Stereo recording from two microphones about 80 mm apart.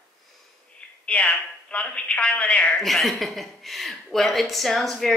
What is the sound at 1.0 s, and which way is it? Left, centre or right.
A woman's voice, centre.